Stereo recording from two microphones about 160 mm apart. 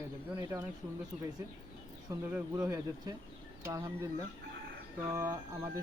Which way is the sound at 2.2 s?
10° right (ahead or behind).